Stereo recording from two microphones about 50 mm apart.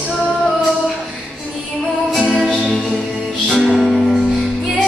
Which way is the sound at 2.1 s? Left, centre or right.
Centre.